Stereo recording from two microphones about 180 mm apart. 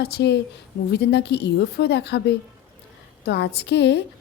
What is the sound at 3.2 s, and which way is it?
Speech, 65° left (ahead or behind).